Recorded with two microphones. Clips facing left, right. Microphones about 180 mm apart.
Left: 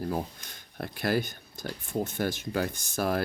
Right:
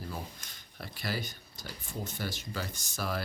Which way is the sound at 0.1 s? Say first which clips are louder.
Left 9 dB; 55° left (ahead or behind).